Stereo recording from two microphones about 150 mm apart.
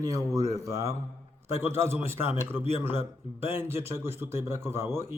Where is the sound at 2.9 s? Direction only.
40° left (ahead or behind).